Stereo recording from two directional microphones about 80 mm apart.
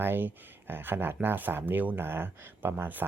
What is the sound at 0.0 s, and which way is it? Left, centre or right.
Speech, right.